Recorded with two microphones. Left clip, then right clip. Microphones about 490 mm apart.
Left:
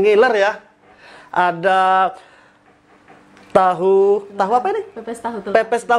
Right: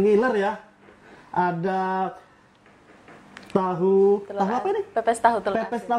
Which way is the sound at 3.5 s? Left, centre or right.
Left.